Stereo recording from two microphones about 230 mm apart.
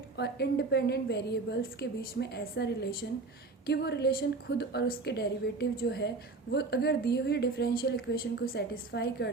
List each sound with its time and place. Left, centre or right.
0.2 s a woman's voice: left